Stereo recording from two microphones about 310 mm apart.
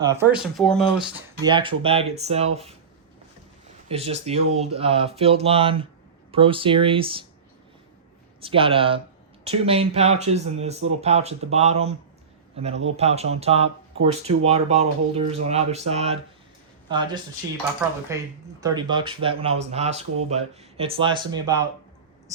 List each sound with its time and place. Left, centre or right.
0.0 s speech: centre
1.4 s speech: centre
3.8 s speech: centre
8.4 s speech: centre